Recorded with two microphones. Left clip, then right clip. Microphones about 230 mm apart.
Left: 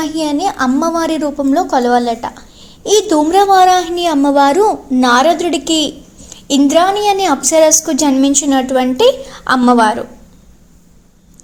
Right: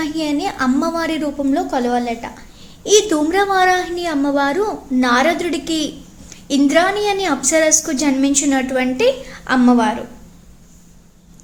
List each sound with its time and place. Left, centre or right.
0.0 s a woman's voice: centre
2.8 s a woman's voice: centre